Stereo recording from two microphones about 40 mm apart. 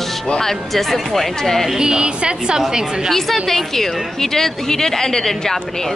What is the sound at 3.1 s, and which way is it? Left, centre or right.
A woman's voice, centre.